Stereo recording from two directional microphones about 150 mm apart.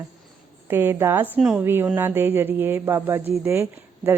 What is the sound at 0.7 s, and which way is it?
A woman's voice, 15° right (ahead or behind).